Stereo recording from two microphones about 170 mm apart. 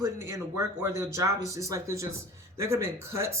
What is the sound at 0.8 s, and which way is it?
Speech, 15° right (ahead or behind).